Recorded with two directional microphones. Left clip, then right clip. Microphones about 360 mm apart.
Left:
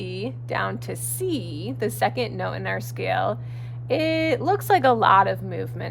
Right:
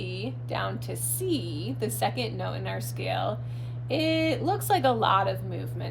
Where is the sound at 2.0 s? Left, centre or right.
Left.